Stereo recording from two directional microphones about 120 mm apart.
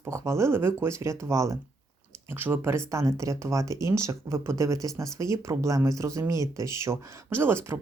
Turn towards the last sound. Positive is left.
turn(degrees=-20)  # may be behind; listen again after turning